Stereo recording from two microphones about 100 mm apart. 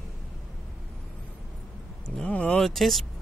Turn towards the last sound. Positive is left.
turn(degrees=0)  # may be behind; listen again after turning